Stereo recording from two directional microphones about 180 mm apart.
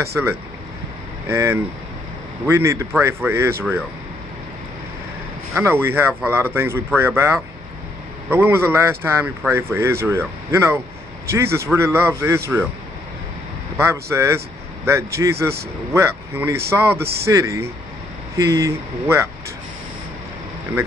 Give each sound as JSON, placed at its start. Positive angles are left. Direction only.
{"t": 0.1, "sound": "speech", "side_deg": -15}
{"t": 5.5, "sound": "speech", "side_deg": -15}
{"t": 13.7, "sound": "speech", "side_deg": -15}